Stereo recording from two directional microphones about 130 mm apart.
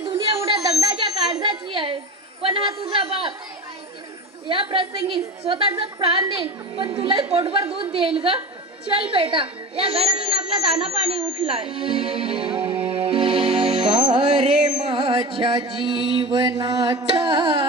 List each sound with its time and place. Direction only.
0.0 s a sound: 40° right (ahead or behind)
2.4 s a woman's voice: 45° right (ahead or behind)
4.4 s a woman's voice: 40° right (ahead or behind)
9.1 s a woman's voice: 40° right (ahead or behind)
12.5 s music: 10° right (ahead or behind)
12.9 s music: 45° right (ahead or behind)
14.1 s carnatic music: 45° right (ahead or behind)
14.5 s carnatic music: 5° right (ahead or behind)
14.8 s a woman's voice: 45° right (ahead or behind)
16.1 s carnatic music: 35° right (ahead or behind)